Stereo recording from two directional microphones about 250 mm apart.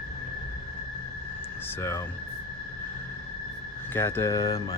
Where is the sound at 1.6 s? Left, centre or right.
Centre.